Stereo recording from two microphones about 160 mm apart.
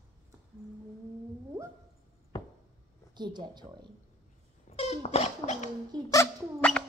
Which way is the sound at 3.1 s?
30° right (ahead or behind).